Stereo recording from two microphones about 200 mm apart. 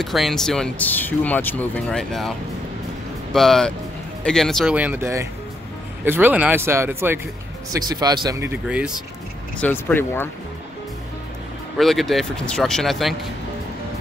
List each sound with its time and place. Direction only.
0.0 s speech: centre (ahead or behind)
3.3 s speech: centre (ahead or behind); by 8.5 s 20° right (ahead or behind)
8.6 s speech: 5° right (ahead or behind)
9.6 s speech: 10° left (ahead or behind)
11.8 s speech: centre (ahead or behind)